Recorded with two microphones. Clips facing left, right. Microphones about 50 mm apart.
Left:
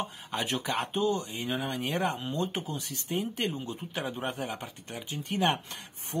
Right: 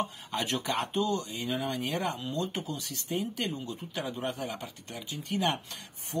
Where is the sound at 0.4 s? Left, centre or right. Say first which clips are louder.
Even; centre.